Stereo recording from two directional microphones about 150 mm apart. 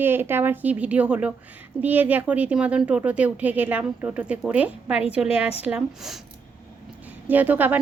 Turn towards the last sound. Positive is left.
turn(degrees=-10)  # may be behind; listen again after turning